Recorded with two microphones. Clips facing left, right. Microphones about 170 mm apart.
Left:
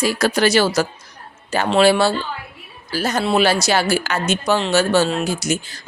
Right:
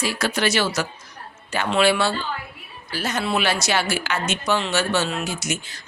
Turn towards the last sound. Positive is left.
turn(degrees=35)  # may be behind; listen again after turning